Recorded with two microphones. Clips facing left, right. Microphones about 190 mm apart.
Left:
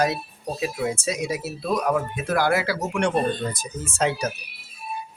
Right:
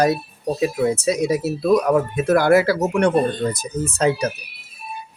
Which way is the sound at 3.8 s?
40° right (ahead or behind).